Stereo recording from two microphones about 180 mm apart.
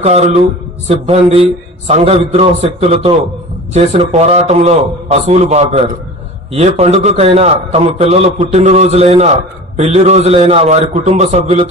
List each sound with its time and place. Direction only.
0.0 s a man's voice: 40° right (ahead or behind)